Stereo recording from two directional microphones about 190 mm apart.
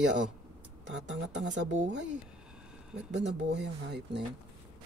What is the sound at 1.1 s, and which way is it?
Speech, 70° right (ahead or behind).